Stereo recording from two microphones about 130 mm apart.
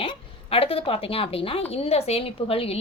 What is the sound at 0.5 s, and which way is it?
A woman's voice, 45° left (ahead or behind).